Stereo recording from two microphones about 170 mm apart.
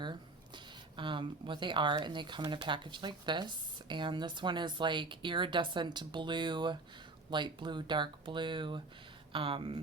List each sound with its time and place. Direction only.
0.0 s speech: 25° right (ahead or behind)